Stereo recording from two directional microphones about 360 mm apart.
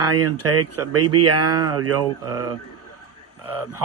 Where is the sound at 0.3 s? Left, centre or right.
Right.